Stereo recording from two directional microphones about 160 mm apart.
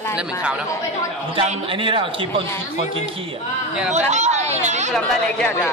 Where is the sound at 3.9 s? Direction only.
45° right (ahead or behind).